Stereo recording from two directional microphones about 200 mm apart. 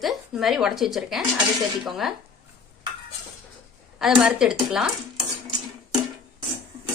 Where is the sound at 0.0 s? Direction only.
Centre (ahead or behind).